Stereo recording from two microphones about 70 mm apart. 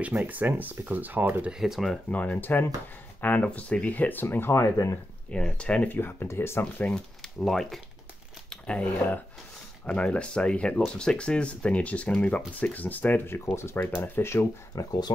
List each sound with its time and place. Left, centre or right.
0.0 s speech: right
1.5 s speech: centre
2.0 s speech: left
5.3 s speech: centre
5.9 s speech: left
6.9 s speech: centre
8.5 s speech: centre; by 14.5 s left
14.8 s speech: left